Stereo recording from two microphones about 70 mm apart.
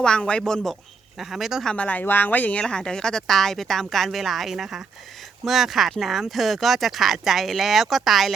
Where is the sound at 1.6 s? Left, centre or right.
Centre.